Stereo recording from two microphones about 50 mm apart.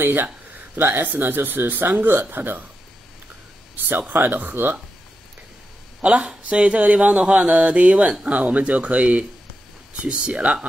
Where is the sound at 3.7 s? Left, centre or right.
Right.